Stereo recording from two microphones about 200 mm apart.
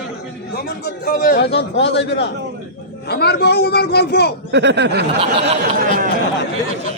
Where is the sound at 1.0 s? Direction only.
50° left (ahead or behind).